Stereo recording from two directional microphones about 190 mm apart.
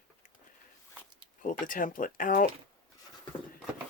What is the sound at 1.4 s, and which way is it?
Speech, 45° left (ahead or behind).